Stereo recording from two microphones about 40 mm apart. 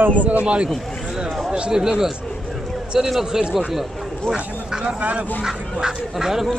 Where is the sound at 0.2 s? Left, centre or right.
Right.